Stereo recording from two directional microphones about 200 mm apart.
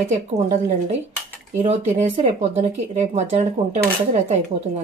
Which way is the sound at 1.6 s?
35° right (ahead or behind).